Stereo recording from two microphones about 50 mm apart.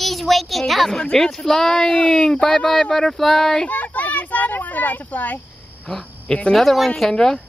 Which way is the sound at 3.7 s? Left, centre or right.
Left.